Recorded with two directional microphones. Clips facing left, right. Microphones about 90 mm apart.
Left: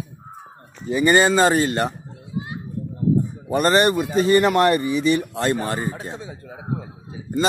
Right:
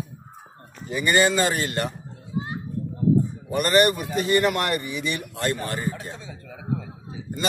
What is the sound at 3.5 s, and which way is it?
A man's voice, 30° left (ahead or behind).